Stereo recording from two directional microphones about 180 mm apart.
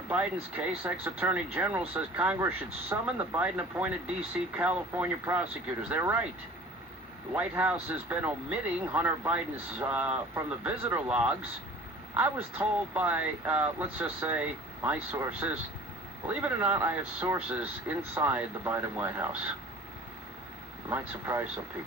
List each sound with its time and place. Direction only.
0.9 s speech: 10° right (ahead or behind)
7.3 s speech: 10° right (ahead or behind)
20.9 s speech: 10° right (ahead or behind)